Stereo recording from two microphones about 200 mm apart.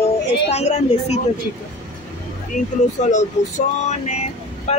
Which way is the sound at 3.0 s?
35° left (ahead or behind).